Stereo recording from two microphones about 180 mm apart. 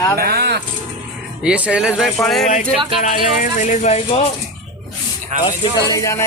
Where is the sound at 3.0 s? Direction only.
45° left (ahead or behind).